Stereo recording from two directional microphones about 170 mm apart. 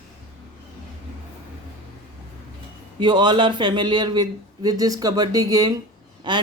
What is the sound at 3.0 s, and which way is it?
Speech, 25° right (ahead or behind).